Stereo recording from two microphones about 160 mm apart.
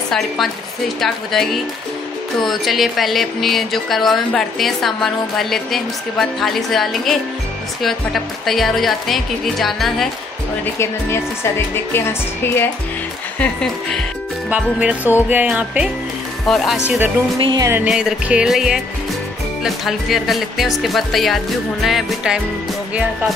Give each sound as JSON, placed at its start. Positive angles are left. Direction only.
{"t": 1.0, "sound": "speech", "side_deg": 0}
{"t": 10.6, "sound": "speech", "side_deg": 15}
{"t": 14.5, "sound": "music", "side_deg": -10}
{"t": 16.4, "sound": "speech", "side_deg": 0}
{"t": 17.4, "sound": "music", "side_deg": -30}
{"t": 17.8, "sound": "speech", "side_deg": -5}